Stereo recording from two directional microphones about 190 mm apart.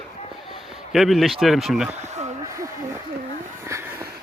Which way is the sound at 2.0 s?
35° right (ahead or behind).